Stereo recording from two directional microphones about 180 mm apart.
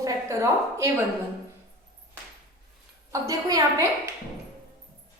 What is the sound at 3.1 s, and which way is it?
A woman's voice, 20° right (ahead or behind).